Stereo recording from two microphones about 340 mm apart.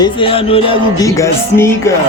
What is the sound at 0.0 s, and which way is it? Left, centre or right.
Music, centre.